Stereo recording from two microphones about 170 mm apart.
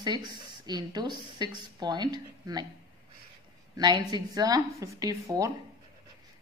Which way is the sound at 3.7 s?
25° right (ahead or behind).